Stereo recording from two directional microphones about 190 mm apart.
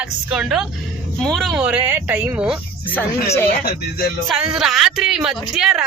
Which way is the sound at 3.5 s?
55° left (ahead or behind).